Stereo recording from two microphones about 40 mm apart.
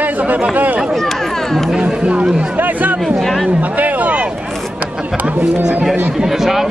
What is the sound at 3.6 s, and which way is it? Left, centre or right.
Speech, right.